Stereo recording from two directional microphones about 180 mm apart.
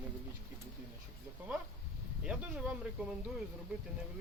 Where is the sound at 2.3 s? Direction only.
5° right (ahead or behind).